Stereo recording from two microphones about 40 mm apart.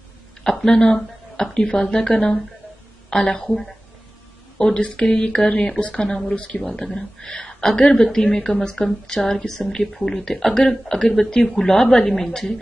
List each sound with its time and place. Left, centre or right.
0.5 s a woman's voice: centre
3.4 s speech: centre
4.6 s a woman's voice: centre
6.0 s a woman's voice: centre
6.3 s speech: left
6.9 s a woman's voice: centre
7.2 s a woman's voice: left